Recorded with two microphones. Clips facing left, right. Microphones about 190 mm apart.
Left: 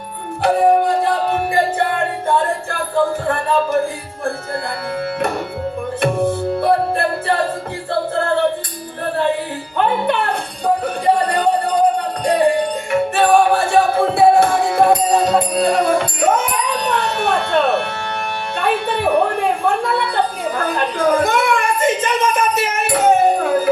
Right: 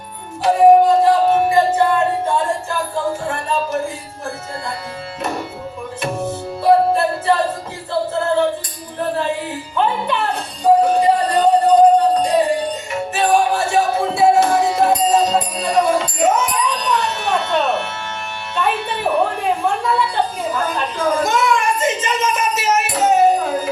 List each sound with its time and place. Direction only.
0.4 s music: 60° left (ahead or behind)
6.0 s music: 60° left (ahead or behind)
9.7 s music: 60° left (ahead or behind)
18.5 s a woman's voice: 55° left (ahead or behind)
20.5 s a sound: 55° left (ahead or behind)